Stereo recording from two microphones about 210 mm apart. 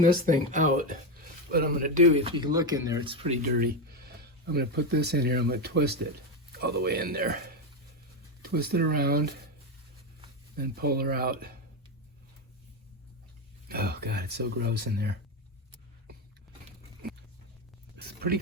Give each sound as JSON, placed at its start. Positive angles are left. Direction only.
{"t": 0.0, "sound": "speech", "side_deg": -40}
{"t": 3.4, "sound": "speech", "side_deg": -45}
{"t": 10.5, "sound": "speech", "side_deg": -45}
{"t": 13.7, "sound": "speech", "side_deg": -50}
{"t": 17.9, "sound": "a sound", "side_deg": -50}